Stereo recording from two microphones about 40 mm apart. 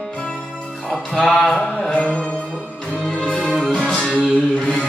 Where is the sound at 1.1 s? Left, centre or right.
Centre.